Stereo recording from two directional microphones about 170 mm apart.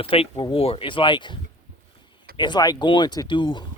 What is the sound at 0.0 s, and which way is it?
Speech, 35° left (ahead or behind).